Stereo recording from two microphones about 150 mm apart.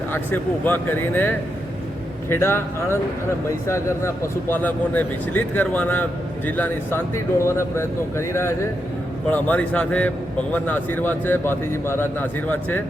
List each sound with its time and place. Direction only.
0.1 s speech: 15° left (ahead or behind)